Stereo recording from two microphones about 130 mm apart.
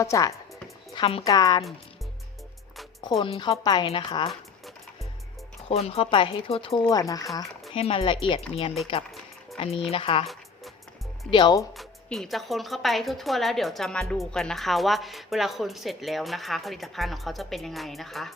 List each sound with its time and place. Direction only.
0.0 s speech: 25° left (ahead or behind)
0.9 s a woman's voice: 45° left (ahead or behind)
1.2 s speech: 25° left (ahead or behind)
3.2 s speech: 45° left (ahead or behind)
3.6 s speech: 30° left (ahead or behind)
3.8 s speech: 45° left (ahead or behind)
5.6 s speech: 50° left (ahead or behind)
6.7 s speech: 25° left (ahead or behind)
7.7 s speech: 50° left (ahead or behind)
11.3 s speech: 40° left (ahead or behind)
11.8 s speech: 5° left (ahead or behind)